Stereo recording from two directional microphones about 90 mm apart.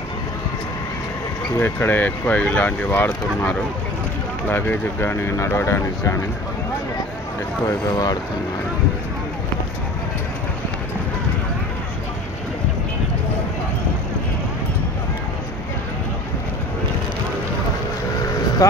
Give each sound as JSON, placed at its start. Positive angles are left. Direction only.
{"t": 1.6, "sound": "speech", "side_deg": 20}
{"t": 7.6, "sound": "speech", "side_deg": 45}
{"t": 18.6, "sound": "speech", "side_deg": 45}